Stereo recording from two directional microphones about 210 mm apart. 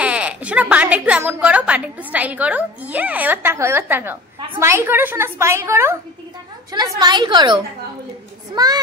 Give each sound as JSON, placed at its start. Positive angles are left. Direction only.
{"t": 0.0, "sound": "a woman's voice", "side_deg": -5}
{"t": 8.6, "sound": "a woman's voice", "side_deg": -20}